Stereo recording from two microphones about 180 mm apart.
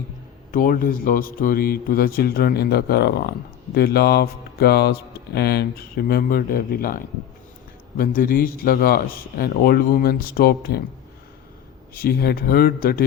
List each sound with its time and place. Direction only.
0.5 s speech: 50° left (ahead or behind)
12.0 s speech: 60° left (ahead or behind)